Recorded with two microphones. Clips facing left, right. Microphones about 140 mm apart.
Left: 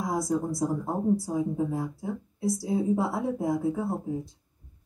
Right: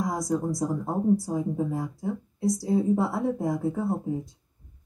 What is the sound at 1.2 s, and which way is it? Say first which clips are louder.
Speech: even; 10° left (ahead or behind).